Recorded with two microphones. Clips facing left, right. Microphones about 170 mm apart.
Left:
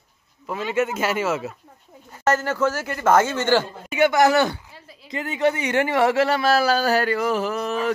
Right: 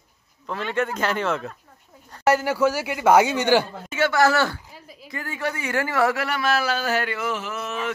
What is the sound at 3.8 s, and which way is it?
A man's voice, 15° left (ahead or behind).